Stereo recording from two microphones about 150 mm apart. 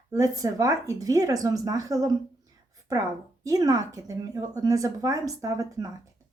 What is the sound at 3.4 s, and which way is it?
Speech, 25° right (ahead or behind).